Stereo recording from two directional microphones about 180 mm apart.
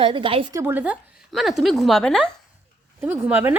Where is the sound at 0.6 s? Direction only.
10° right (ahead or behind).